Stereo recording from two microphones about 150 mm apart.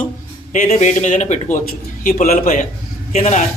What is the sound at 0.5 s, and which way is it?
Speech, 50° left (ahead or behind).